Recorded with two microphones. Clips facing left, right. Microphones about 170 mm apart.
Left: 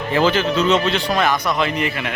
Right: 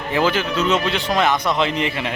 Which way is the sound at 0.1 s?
10° right (ahead or behind).